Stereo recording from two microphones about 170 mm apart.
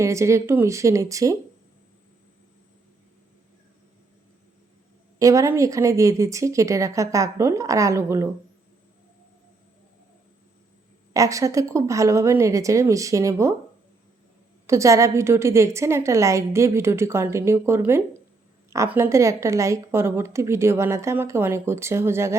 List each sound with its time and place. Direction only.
0.0 s a woman's voice: 15° right (ahead or behind)
5.2 s a woman's voice: 20° right (ahead or behind)
11.1 s a woman's voice: 20° right (ahead or behind)
14.7 s a woman's voice: 20° right (ahead or behind)